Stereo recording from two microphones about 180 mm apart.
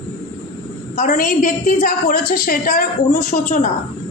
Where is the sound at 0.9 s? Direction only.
45° left (ahead or behind).